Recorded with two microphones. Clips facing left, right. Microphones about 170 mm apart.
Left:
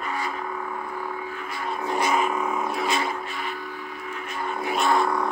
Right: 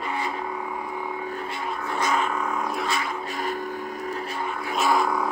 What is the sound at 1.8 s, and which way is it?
Vehicle, 10° left (ahead or behind).